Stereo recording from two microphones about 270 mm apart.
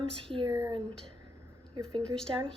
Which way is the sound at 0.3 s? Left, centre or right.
Centre.